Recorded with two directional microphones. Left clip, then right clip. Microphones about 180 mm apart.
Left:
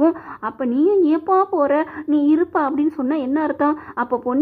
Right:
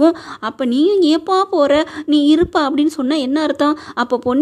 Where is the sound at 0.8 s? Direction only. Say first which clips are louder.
Right 2 dB; 20° right (ahead or behind).